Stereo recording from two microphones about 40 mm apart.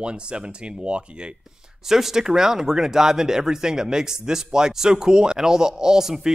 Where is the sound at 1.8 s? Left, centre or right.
Centre.